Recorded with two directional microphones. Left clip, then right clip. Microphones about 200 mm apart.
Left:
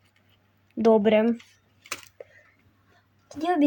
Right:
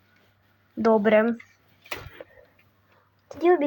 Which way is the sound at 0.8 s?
15° left (ahead or behind).